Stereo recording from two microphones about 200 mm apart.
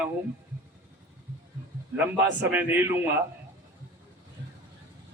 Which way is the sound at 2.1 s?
10° right (ahead or behind).